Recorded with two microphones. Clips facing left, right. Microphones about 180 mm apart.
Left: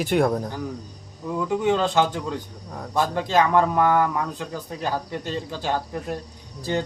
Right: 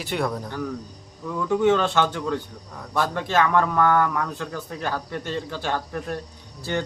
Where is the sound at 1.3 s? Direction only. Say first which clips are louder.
Right 2 dB; 15° left (ahead or behind).